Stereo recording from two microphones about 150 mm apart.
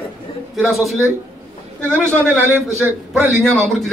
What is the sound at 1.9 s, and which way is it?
Speech, 15° right (ahead or behind).